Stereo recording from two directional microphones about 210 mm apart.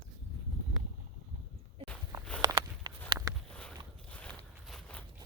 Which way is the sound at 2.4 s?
20° right (ahead or behind).